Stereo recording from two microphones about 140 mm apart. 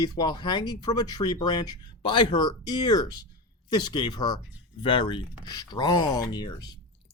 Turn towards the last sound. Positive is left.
turn(degrees=30)  # may be behind; listen again after turning